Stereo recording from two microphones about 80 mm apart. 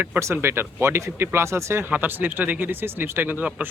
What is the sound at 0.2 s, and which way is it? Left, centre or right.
Speech, right.